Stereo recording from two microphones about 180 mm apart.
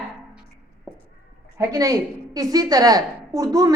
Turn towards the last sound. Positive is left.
turn(degrees=-20)  # may be behind; listen again after turning